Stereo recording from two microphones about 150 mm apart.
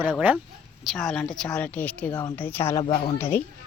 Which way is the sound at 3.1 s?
15° left (ahead or behind).